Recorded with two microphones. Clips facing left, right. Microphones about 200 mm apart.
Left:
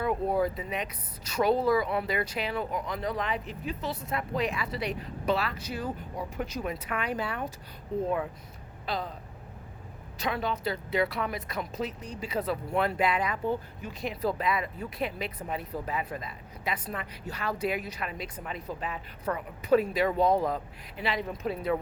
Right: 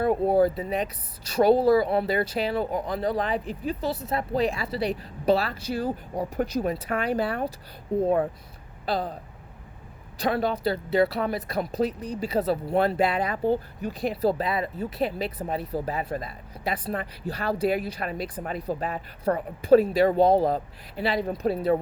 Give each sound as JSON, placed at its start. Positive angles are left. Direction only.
{"t": 0.0, "sound": "speech", "side_deg": -35}
{"t": 10.2, "sound": "speech", "side_deg": -35}